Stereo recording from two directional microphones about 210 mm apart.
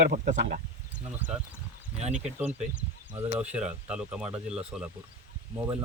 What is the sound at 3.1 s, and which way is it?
Speech, 5° right (ahead or behind).